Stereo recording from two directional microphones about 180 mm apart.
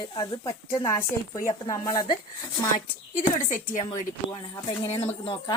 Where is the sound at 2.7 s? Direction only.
45° left (ahead or behind).